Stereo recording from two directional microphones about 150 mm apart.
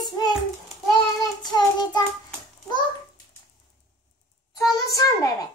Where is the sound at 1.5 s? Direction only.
30° left (ahead or behind).